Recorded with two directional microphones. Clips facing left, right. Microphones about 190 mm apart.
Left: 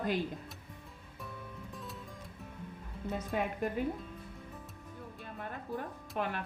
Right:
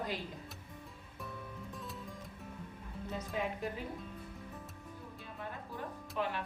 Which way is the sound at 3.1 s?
55° left (ahead or behind).